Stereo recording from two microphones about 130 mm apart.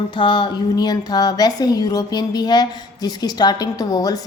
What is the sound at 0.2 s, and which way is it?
A woman's voice, 35° left (ahead or behind).